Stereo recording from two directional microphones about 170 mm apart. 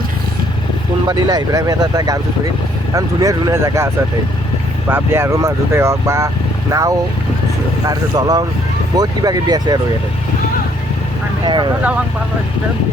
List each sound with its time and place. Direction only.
1.0 s speech: 25° right (ahead or behind)
4.9 s speech: 15° right (ahead or behind)
11.4 s speech: 25° right (ahead or behind)